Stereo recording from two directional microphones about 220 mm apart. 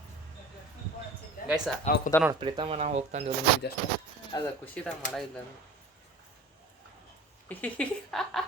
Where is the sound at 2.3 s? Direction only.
20° right (ahead or behind).